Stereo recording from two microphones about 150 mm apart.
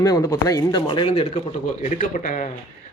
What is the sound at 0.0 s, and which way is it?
Speech, 25° left (ahead or behind).